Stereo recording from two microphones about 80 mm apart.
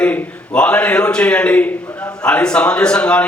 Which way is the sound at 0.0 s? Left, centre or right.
Centre.